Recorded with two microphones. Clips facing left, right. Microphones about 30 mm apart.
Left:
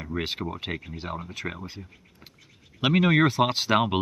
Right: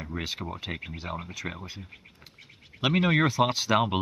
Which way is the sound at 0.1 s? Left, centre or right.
Centre.